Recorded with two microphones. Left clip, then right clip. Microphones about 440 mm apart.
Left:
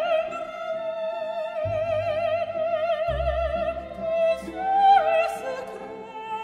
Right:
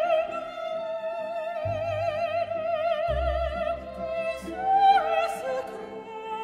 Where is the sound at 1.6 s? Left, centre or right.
Centre.